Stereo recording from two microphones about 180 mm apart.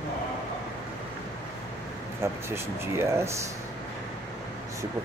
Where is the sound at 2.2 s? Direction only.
15° right (ahead or behind).